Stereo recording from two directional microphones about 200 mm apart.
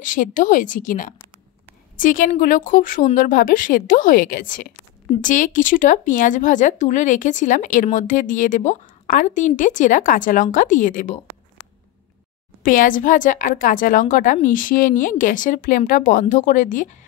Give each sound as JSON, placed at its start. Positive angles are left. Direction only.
{"t": 0.0, "sound": "a woman's voice", "side_deg": 40}
{"t": 12.6, "sound": "speech", "side_deg": 40}